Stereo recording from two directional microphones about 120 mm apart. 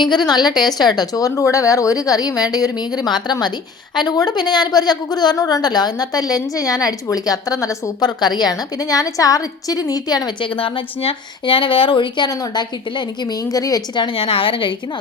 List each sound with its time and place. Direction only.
0.0 s a woman's voice: 35° left (ahead or behind)